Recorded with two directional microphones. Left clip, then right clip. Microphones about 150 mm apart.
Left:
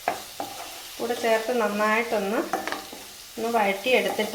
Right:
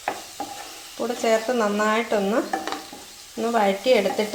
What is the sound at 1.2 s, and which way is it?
A woman's voice, 50° right (ahead or behind).